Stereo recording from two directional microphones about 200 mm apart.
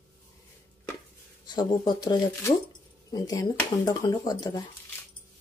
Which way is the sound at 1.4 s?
20° left (ahead or behind).